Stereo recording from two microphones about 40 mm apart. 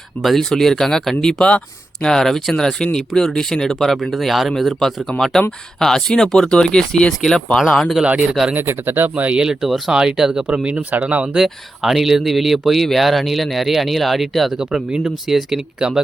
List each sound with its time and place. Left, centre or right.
0.2 s speech: centre
0.5 s speech: centre
1.5 s speech: left
2.0 s speech: centre
4.1 s speech: centre
8.5 s speech: right
9.1 s speech: right
9.4 s speech: centre
9.6 s speech: centre
9.9 s speech: centre
10.5 s speech: right
11.4 s speech: centre
14.6 s speech: centre